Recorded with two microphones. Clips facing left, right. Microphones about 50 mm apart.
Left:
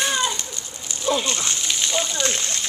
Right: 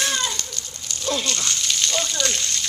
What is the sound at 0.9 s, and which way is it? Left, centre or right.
Fire, centre.